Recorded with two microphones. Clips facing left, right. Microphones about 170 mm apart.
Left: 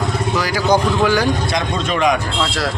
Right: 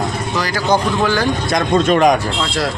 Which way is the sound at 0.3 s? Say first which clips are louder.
Even; 10° left (ahead or behind).